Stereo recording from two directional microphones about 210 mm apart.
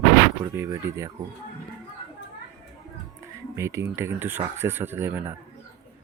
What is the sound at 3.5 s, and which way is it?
Speech, 15° right (ahead or behind).